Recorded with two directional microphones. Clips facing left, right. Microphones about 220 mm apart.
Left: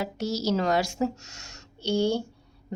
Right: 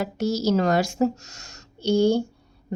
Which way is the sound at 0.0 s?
50° right (ahead or behind).